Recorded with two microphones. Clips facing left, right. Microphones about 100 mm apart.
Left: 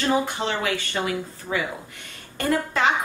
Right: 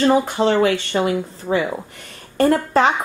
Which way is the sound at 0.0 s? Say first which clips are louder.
Right 7 dB; 40° right (ahead or behind).